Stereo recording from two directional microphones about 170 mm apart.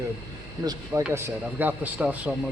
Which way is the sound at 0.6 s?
20° right (ahead or behind).